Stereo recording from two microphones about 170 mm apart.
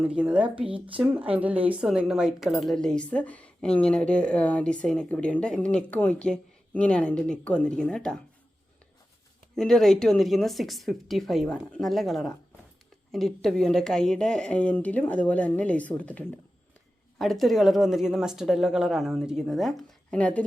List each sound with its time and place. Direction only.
0.0 s speech: 5° right (ahead or behind)
0.5 s speech: 30° right (ahead or behind)
0.9 s speech: 10° right (ahead or behind)
9.6 s speech: centre (ahead or behind)